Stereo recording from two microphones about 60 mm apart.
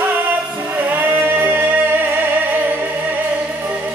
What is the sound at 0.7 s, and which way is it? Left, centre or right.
Music, right.